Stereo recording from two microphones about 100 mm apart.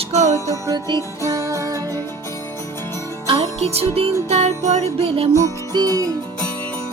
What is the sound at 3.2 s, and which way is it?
Music, 70° right (ahead or behind).